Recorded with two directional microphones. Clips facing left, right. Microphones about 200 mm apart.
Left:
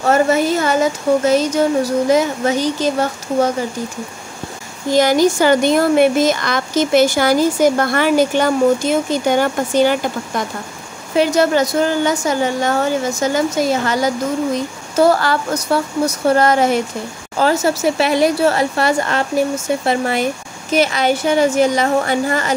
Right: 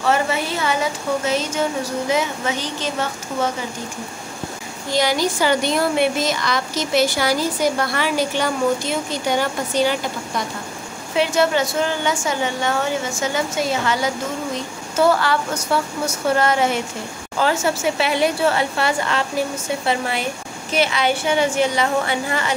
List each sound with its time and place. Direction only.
0.0 s speech: 45° left (ahead or behind)
4.9 s a woman's voice: 45° left (ahead or behind)